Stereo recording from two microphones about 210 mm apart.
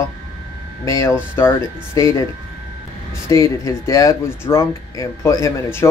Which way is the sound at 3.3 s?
15° left (ahead or behind).